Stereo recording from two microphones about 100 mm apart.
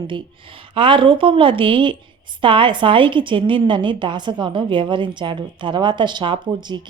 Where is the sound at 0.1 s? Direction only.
60° right (ahead or behind).